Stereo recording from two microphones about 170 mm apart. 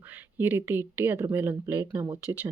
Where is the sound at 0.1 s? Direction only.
10° right (ahead or behind).